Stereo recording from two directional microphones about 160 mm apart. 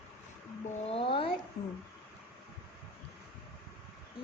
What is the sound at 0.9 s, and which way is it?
Speech, 35° left (ahead or behind).